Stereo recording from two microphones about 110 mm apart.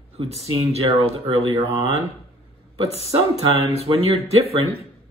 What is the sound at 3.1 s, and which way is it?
Speech, 70° right (ahead or behind).